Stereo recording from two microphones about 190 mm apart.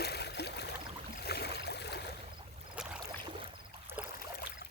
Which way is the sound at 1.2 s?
60° left (ahead or behind).